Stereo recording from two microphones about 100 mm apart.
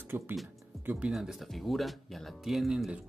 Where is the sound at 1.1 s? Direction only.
5° right (ahead or behind).